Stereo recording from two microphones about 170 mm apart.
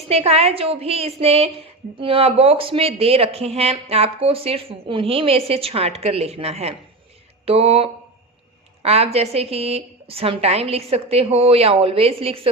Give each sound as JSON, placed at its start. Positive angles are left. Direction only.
{"t": 0.1, "sound": "a woman's voice", "side_deg": -35}
{"t": 7.4, "sound": "a sound", "side_deg": -35}
{"t": 8.8, "sound": "a woman's voice", "side_deg": -35}